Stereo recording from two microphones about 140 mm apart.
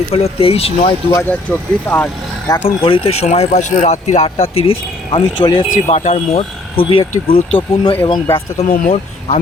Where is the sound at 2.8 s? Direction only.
40° left (ahead or behind).